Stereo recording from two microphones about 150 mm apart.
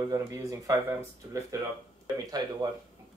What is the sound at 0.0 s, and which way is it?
Speech, 20° right (ahead or behind).